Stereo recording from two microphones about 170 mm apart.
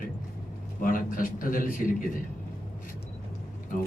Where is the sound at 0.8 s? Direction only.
55° left (ahead or behind).